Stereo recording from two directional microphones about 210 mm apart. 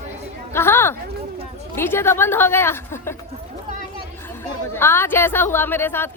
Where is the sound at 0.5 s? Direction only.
10° left (ahead or behind).